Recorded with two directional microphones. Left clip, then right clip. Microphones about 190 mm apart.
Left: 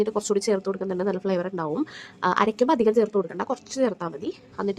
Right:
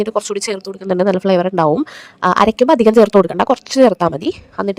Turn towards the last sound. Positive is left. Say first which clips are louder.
# right 9 dB
turn(degrees=-40)  # may be behind; listen again after turning